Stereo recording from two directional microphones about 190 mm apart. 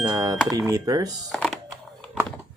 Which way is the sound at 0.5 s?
20° right (ahead or behind).